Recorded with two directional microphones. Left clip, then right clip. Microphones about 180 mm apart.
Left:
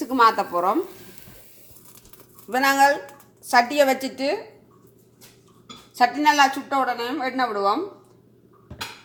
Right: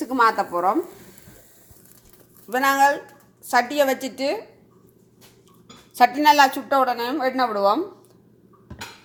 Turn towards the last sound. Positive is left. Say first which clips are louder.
# right 2 dB
turn(degrees=-35)  # may be behind; listen again after turning